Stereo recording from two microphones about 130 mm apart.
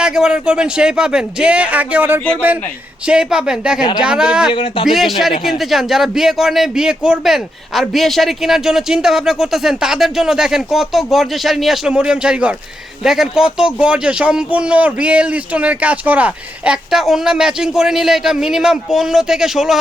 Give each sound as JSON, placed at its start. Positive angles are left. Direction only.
{"t": 0.0, "sound": "a man's voice", "side_deg": -5}
{"t": 4.5, "sound": "speech", "side_deg": 40}
{"t": 4.9, "sound": "a man's voice", "side_deg": 0}